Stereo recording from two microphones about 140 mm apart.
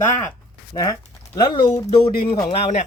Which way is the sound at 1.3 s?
30° left (ahead or behind).